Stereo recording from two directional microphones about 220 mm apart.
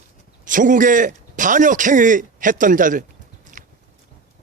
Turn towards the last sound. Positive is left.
turn(degrees=-35)  # may be behind; listen again after turning